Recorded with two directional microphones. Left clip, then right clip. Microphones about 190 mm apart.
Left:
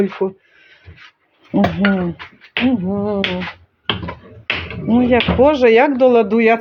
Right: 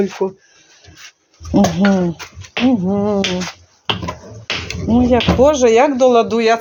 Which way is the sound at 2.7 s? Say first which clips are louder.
Right 3 dB; 25° right (ahead or behind).